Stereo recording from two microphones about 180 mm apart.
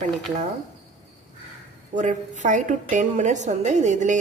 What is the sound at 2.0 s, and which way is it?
A woman's voice, 45° right (ahead or behind).